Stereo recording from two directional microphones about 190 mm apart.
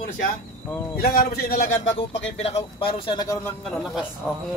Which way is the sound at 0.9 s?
50° left (ahead or behind).